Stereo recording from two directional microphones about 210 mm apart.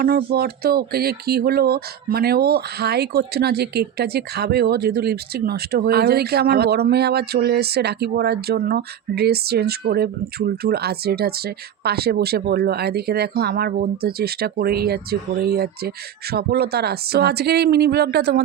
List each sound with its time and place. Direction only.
0.0 s speech: 45° right (ahead or behind)